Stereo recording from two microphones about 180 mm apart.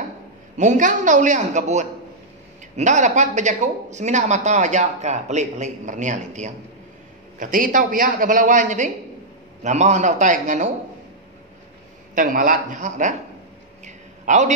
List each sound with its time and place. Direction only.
0.6 s a man's voice: 45° right (ahead or behind)
12.2 s a man's voice: 50° right (ahead or behind)
13.8 s a sound: 40° right (ahead or behind)